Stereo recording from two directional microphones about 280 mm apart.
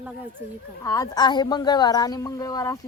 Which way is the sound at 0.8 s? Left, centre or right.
Centre.